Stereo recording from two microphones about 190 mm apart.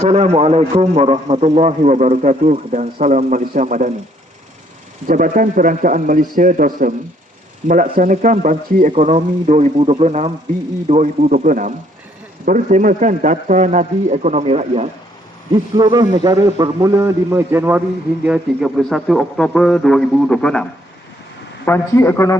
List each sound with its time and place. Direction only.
0.0 s a man's voice: 35° right (ahead or behind)
5.0 s a man's voice: 45° right (ahead or behind)
15.7 s a man's voice: 20° right (ahead or behind); by 22.4 s 15° left (ahead or behind)